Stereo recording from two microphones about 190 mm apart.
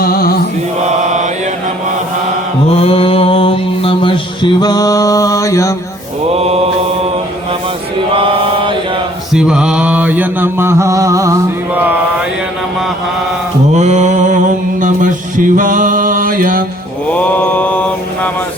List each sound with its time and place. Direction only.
0.0 s chant: 50° left (ahead or behind)
2.7 s mantra: 30° left (ahead or behind)
6.3 s mantra: 30° right (ahead or behind)
8.1 s mantra: 25° right (ahead or behind)
9.3 s mantra: 5° right (ahead or behind)
13.7 s mantra: 40° right (ahead or behind)
17.1 s mantra: 5° left (ahead or behind)